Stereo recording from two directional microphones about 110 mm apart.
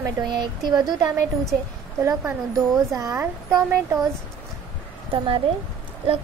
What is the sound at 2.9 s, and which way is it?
Speech, 30° right (ahead or behind).